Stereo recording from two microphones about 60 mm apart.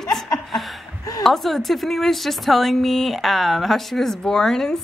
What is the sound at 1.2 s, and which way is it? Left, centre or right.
A woman's voice, centre.